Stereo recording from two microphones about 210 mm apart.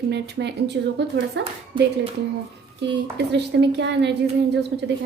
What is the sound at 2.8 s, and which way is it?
A woman's voice, 55° right (ahead or behind).